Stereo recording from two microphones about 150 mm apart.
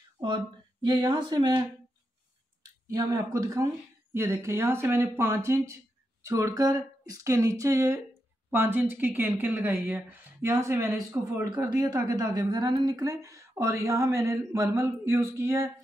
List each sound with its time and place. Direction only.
0.8 s speech: 30° right (ahead or behind)
2.9 s a woman's voice: 25° right (ahead or behind)